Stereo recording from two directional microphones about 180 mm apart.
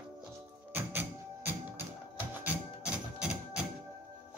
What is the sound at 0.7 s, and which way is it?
Music, 10° right (ahead or behind).